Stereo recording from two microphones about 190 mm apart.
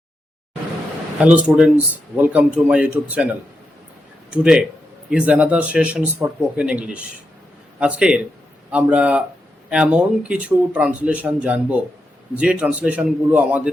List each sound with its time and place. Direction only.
1.5 s speech: 5° right (ahead or behind)
4.3 s speech: 5° right (ahead or behind)